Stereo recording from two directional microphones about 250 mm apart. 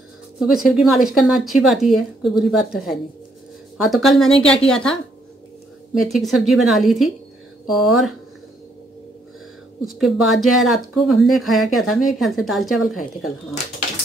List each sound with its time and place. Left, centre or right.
0.4 s speech: centre
5.9 s speech: centre
9.8 s speech: centre